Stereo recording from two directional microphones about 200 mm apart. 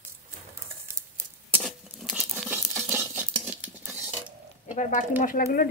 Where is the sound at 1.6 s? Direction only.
Centre (ahead or behind).